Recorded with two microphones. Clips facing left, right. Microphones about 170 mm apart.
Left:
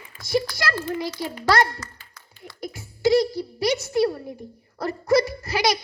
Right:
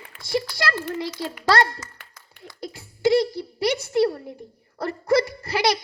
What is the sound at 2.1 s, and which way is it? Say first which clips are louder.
A child's voice: left 1 dB; 25° right (ahead or behind).